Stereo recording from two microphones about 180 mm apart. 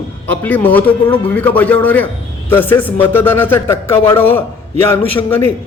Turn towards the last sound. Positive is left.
turn(degrees=10)  # may be behind; listen again after turning